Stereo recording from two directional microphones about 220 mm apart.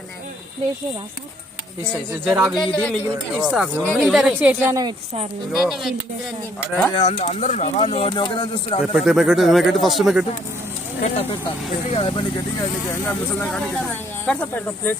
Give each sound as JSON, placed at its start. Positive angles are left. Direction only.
{"t": 2.2, "sound": "a woman's voice", "side_deg": -5}
{"t": 2.6, "sound": "a woman's voice", "side_deg": 5}
{"t": 5.5, "sound": "speech", "side_deg": 0}
{"t": 6.9, "sound": "speech", "side_deg": 25}
{"t": 8.9, "sound": "speech", "side_deg": 0}
{"t": 11.0, "sound": "speech", "side_deg": 25}
{"t": 13.1, "sound": "speech", "side_deg": 5}